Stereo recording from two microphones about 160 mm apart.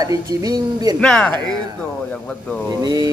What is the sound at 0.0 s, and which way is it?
Speech, 20° right (ahead or behind).